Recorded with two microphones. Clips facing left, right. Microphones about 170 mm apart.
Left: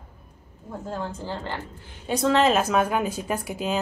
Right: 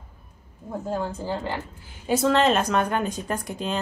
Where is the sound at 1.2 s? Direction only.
10° right (ahead or behind).